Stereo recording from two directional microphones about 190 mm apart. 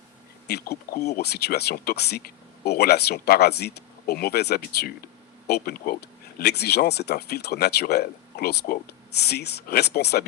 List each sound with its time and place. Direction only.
0.4 s speech: 60° left (ahead or behind)